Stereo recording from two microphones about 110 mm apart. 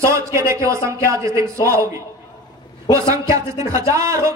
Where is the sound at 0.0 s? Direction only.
25° right (ahead or behind).